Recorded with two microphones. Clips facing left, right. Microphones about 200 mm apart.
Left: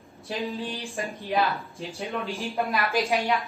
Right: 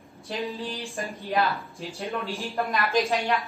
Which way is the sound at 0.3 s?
Centre (ahead or behind).